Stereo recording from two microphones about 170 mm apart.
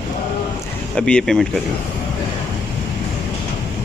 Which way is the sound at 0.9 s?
5° left (ahead or behind).